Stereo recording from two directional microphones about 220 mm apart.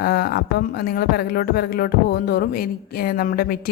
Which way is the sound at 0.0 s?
45° left (ahead or behind).